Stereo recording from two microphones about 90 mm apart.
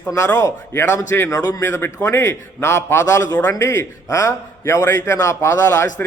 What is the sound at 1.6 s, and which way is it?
A man's voice, 25° left (ahead or behind).